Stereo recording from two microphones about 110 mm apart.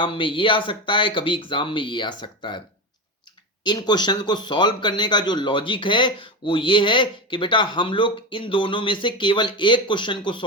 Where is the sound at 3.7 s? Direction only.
40° left (ahead or behind).